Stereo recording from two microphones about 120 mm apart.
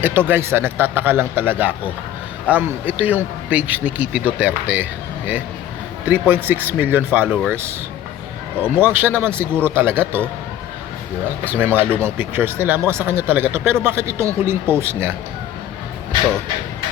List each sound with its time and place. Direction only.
0.0 s speech: 20° right (ahead or behind)
6.1 s speech: 15° right (ahead or behind)
8.6 s speech: 20° right (ahead or behind)
11.4 s speech: 15° right (ahead or behind)